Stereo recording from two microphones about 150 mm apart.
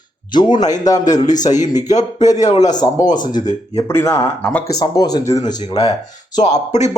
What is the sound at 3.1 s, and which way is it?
A man's voice, 30° left (ahead or behind).